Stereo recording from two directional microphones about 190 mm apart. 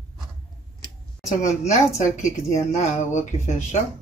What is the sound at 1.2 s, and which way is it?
Speech, 40° left (ahead or behind).